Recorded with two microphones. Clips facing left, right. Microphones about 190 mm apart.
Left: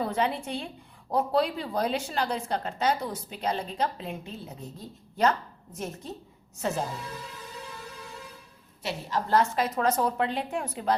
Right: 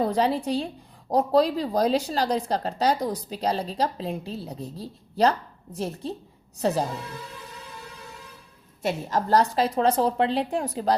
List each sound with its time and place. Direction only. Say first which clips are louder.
0.0 s speech: right 5 dB; 35° right (ahead or behind)
8.8 s speech: right 5 dB; 45° right (ahead or behind)